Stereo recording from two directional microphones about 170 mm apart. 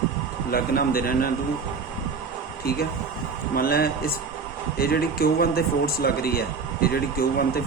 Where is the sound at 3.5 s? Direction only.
60° left (ahead or behind).